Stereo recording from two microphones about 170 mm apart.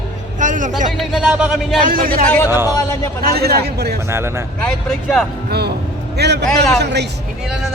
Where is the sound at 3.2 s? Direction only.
65° right (ahead or behind).